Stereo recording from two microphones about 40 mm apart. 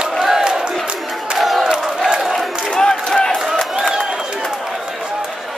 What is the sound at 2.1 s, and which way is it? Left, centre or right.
Crowd, centre.